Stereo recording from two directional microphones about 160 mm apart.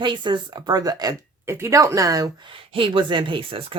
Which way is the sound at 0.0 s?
30° right (ahead or behind).